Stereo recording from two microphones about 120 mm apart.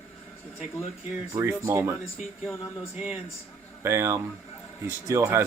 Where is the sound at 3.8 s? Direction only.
25° right (ahead or behind).